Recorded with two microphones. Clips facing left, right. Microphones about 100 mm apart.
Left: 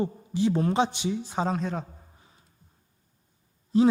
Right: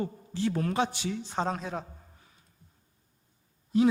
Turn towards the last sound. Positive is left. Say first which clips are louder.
# left 3 dB
turn(degrees=30)  # may be behind; listen again after turning